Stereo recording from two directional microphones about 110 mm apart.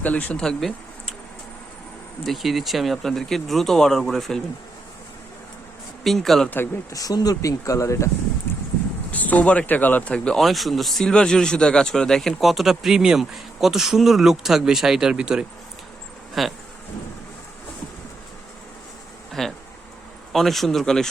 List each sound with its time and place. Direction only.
0.0 s speech: 15° left (ahead or behind)
2.2 s speech: centre (ahead or behind)
6.0 s speech: centre (ahead or behind)
6.9 s speech: 35° left (ahead or behind)
9.1 s speech: 15° left (ahead or behind)
19.3 s speech: 5° left (ahead or behind)